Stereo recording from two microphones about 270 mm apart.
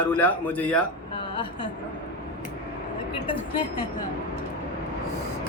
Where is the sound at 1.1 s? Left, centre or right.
Centre.